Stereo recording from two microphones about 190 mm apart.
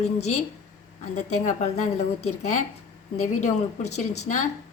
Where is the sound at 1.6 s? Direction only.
35° left (ahead or behind).